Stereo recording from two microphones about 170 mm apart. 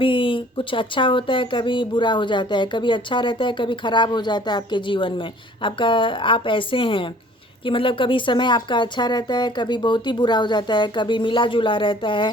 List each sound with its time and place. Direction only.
0.0 s speech: 30° left (ahead or behind)